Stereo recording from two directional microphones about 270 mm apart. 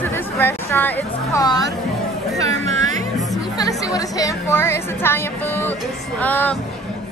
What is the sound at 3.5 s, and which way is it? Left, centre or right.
A woman's voice, centre.